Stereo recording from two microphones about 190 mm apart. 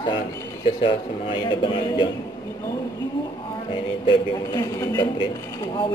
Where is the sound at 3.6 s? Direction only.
25° left (ahead or behind).